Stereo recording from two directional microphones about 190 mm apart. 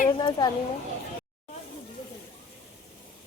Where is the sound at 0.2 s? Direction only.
20° left (ahead or behind).